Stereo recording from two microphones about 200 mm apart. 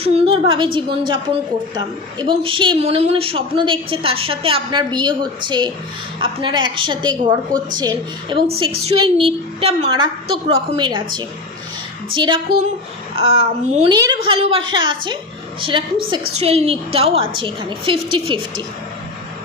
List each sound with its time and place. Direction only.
0.0 s a woman's voice: 30° right (ahead or behind)
13.9 s a woman's voice: 20° right (ahead or behind)
16.4 s a woman's voice: 30° right (ahead or behind)